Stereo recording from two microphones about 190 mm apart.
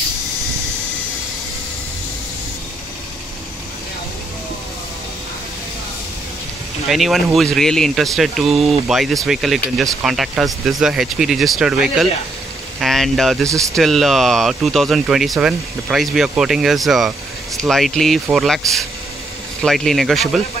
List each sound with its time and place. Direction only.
6.9 s speech: centre (ahead or behind)
13.5 s speech: 15° right (ahead or behind)
13.7 s speech: centre (ahead or behind)